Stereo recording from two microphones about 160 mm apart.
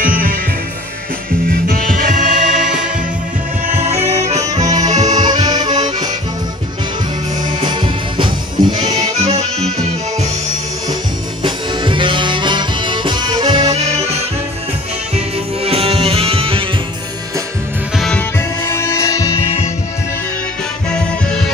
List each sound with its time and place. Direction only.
0.0 s music: 60° right (ahead or behind)
1.7 s music: 60° right (ahead or behind)
4.0 s music: 45° right (ahead or behind)
5.3 s accordion: 25° right (ahead or behind)
7.4 s music: 30° right (ahead or behind)
11.4 s music: 30° right (ahead or behind)
15.1 s music: 40° right (ahead or behind)
17.9 s music: 5° left (ahead or behind)
18.6 s music: 15° left (ahead or behind)
20.9 s music: 5° left (ahead or behind)